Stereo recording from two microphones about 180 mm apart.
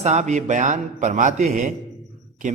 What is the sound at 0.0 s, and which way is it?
A man's voice, 40° right (ahead or behind).